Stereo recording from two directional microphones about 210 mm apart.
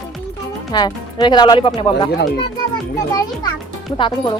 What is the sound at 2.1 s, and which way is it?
Speech, 50° left (ahead or behind).